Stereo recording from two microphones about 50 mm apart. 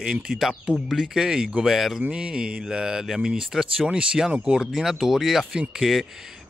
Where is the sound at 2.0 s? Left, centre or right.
Centre.